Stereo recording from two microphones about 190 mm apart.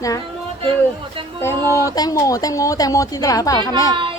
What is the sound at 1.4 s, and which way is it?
Speech, 15° left (ahead or behind).